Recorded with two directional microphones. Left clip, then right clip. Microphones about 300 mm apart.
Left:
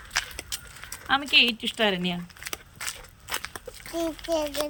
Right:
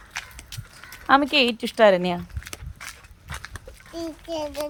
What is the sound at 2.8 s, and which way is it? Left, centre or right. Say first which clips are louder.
Crushing: left 3 dB; left.